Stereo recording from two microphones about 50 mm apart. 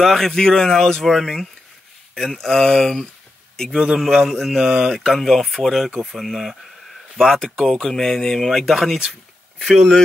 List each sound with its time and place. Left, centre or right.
0.0 s speech: centre
3.7 s a man's voice: centre
4.3 s mantra: centre
5.0 s speech: centre
5.9 s mantra: centre
7.4 s speech: centre